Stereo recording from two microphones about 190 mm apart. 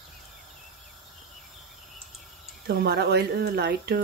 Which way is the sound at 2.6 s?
60° right (ahead or behind).